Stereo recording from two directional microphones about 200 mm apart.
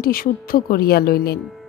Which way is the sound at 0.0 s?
45° left (ahead or behind).